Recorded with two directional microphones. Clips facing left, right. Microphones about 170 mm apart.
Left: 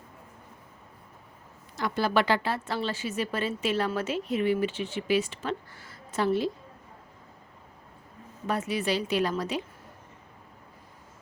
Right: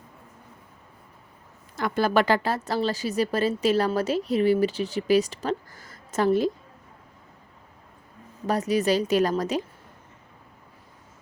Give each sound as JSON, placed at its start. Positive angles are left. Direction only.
{"t": 1.7, "sound": "speech", "side_deg": -50}
{"t": 8.4, "sound": "speech", "side_deg": -40}